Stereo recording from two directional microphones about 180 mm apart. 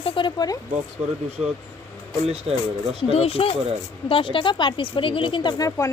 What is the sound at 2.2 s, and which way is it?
Speech, 35° right (ahead or behind).